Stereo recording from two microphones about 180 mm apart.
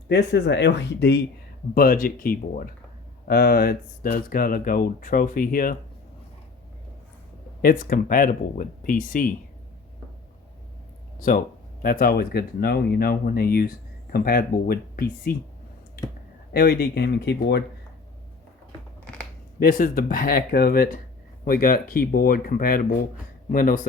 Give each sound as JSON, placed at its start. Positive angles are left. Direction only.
{"t": 0.1, "sound": "speech", "side_deg": 70}
{"t": 1.7, "sound": "speech", "side_deg": 55}
{"t": 7.6, "sound": "speech", "side_deg": 50}
{"t": 11.2, "sound": "speech", "side_deg": 50}
{"t": 16.5, "sound": "speech", "side_deg": 60}
{"t": 19.5, "sound": "speech", "side_deg": 55}